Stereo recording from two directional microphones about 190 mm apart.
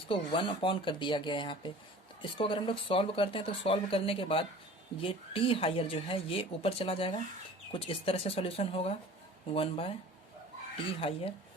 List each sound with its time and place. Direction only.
0.1 s speech: 25° left (ahead or behind)
11.0 s speech: 30° left (ahead or behind)